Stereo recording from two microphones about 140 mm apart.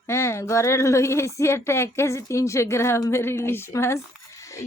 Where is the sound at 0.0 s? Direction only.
20° left (ahead or behind).